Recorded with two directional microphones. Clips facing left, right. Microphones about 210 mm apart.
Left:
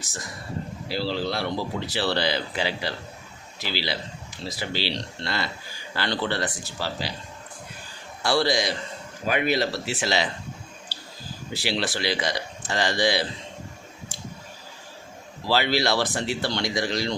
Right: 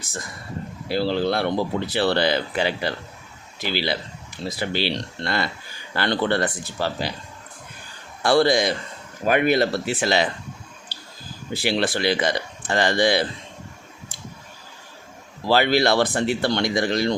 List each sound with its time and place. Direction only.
0.9 s speech: 55° right (ahead or behind)
8.2 s speech: 55° right (ahead or behind)
11.5 s speech: 55° right (ahead or behind)
15.4 s speech: 55° right (ahead or behind)